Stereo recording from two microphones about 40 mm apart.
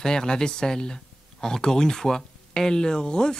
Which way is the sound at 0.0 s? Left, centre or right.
Centre.